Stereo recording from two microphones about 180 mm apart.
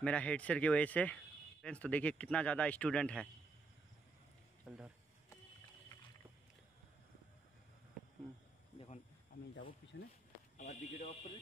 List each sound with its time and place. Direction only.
0.0 s speech: 5° left (ahead or behind)
4.6 s speech: centre (ahead or behind)
8.7 s a sound: 35° left (ahead or behind)
10.6 s speech: 40° left (ahead or behind)